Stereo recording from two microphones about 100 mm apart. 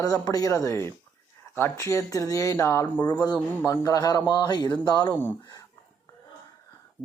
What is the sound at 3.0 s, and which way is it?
A woman's voice, 45° left (ahead or behind).